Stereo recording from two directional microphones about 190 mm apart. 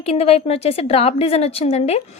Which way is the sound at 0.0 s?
30° left (ahead or behind).